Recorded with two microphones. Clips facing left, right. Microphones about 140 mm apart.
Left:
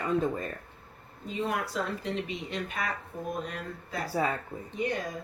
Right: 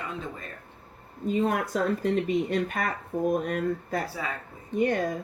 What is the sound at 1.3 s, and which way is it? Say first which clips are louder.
Speech: right 6 dB; 50° right (ahead or behind).